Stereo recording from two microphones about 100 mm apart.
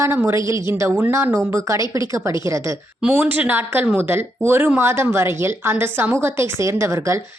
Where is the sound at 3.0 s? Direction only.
15° right (ahead or behind).